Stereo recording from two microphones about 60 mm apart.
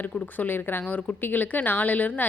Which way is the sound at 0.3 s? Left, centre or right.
Left.